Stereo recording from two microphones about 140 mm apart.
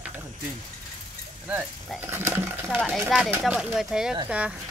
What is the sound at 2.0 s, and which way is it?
Speech, 15° right (ahead or behind).